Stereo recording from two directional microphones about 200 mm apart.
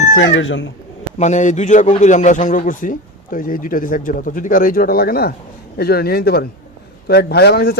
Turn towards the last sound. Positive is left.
turn(degrees=55)  # may be behind; listen again after turning